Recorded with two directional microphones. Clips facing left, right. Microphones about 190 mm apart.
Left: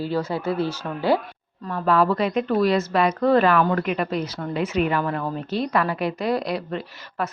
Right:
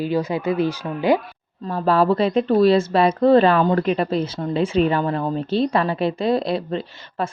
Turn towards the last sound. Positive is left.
turn(degrees=-25)  # may be behind; listen again after turning